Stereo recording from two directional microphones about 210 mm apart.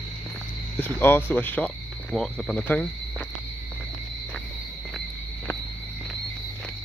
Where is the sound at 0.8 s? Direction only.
10° left (ahead or behind).